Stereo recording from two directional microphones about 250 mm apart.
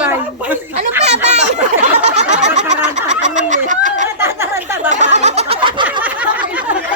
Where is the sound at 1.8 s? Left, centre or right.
Right.